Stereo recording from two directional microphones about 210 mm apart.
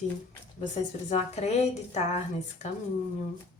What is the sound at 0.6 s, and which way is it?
A woman's voice, 35° left (ahead or behind).